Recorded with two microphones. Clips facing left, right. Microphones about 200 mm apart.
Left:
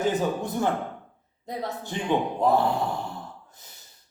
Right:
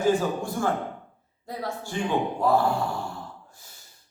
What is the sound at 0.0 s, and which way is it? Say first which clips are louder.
A man's voice: right 2 dB; 20° left (ahead or behind).